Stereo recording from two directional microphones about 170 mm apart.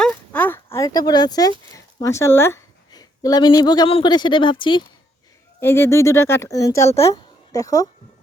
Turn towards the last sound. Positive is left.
turn(degrees=20)  # may be behind; listen again after turning